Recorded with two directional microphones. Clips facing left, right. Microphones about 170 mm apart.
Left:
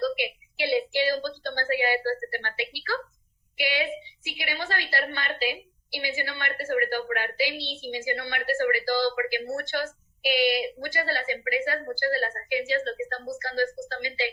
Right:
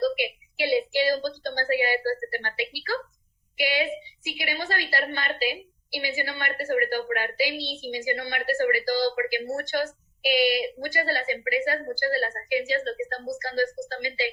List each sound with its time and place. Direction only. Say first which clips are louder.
0.0 s a sound: right 2 dB; 45° right (ahead or behind)
0.9 s a woman's voice: right 2 dB; 40° right (ahead or behind)
9.6 s a woman's voice: right 3 dB; 15° right (ahead or behind)
10.2 s a woman's voice: right 1 dB; 40° right (ahead or behind)